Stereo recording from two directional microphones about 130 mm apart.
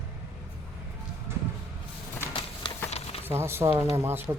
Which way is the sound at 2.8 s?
50° left (ahead or behind).